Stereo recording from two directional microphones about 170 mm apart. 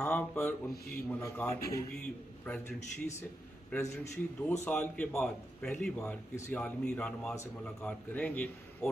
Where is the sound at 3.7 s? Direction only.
10° left (ahead or behind).